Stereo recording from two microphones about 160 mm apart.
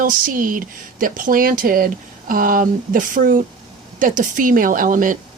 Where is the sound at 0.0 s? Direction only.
60° right (ahead or behind).